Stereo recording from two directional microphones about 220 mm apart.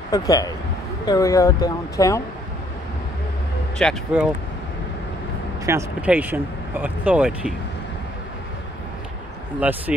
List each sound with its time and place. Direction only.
0.1 s speech: 15° left (ahead or behind)
3.7 s speech: centre (ahead or behind)
5.7 s speech: 10° right (ahead or behind)
9.6 s speech: 10° right (ahead or behind)